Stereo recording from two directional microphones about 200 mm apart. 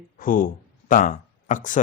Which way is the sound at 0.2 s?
45° left (ahead or behind).